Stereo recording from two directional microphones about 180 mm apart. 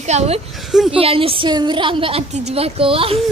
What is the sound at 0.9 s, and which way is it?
A woman's voice, 30° right (ahead or behind).